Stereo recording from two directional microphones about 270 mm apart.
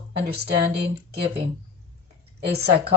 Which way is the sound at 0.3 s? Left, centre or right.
Right.